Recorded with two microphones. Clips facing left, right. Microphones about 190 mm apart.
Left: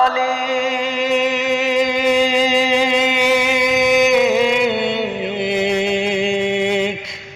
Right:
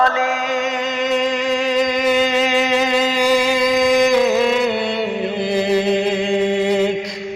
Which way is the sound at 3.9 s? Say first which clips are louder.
Left 2 dB; 5° left (ahead or behind).